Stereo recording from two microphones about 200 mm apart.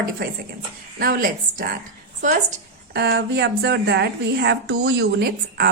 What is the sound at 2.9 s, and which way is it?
A woman's voice, 55° right (ahead or behind).